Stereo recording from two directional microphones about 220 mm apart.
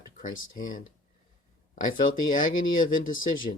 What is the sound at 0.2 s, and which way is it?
Speech, 40° left (ahead or behind).